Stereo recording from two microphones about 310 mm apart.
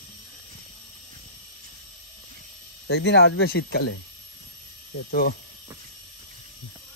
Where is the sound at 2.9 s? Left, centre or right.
Left.